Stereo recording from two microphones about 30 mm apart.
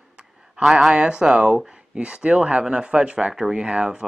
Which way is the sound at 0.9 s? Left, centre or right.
Right.